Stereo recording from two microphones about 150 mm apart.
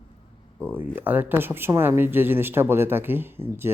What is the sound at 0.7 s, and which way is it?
Speech, 15° right (ahead or behind).